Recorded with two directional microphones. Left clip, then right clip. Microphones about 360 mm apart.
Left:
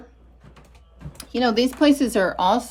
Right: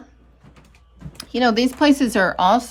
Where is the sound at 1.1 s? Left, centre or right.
Centre.